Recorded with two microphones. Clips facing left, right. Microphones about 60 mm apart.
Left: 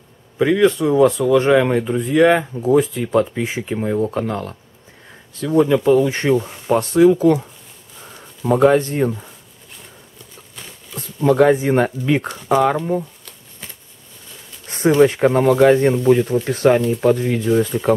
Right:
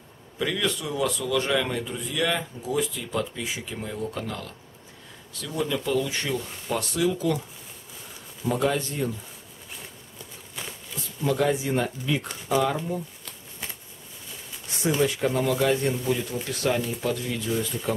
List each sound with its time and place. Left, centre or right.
0.4 s speech: left
8.5 s speech: left
10.5 s a sound: centre
11.0 s speech: left
14.9 s speech: left